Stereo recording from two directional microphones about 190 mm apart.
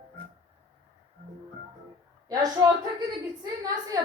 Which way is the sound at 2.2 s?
20° right (ahead or behind).